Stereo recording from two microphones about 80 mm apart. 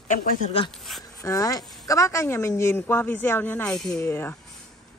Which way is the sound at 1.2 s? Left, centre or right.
Left.